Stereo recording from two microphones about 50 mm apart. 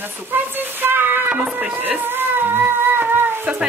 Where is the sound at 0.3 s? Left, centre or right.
Right.